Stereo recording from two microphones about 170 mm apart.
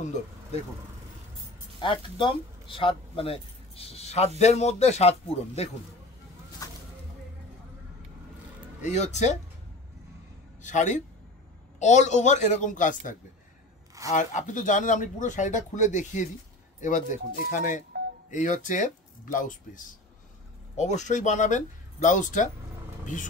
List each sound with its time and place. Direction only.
0.0 s speech: 45° left (ahead or behind)
1.8 s speech: 30° left (ahead or behind)
6.6 s a sound: 20° left (ahead or behind)
8.8 s speech: 45° left (ahead or behind)
10.6 s a man's voice: 45° left (ahead or behind)
14.1 s speech: 45° left (ahead or behind)